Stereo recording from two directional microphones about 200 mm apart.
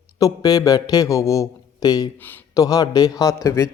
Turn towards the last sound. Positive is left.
turn(degrees=15)  # may be behind; listen again after turning